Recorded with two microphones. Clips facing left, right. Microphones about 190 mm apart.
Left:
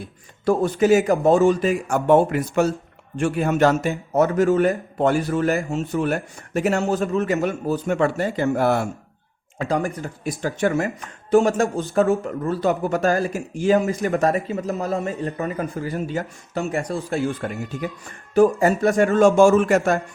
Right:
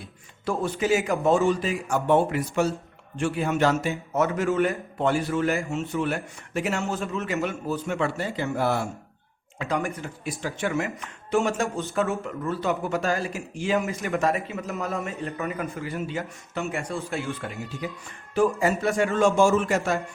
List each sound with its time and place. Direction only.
0.4 s a man's voice: 40° left (ahead or behind)
9.6 s a man's voice: 35° left (ahead or behind); by 20.0 s 50° left (ahead or behind)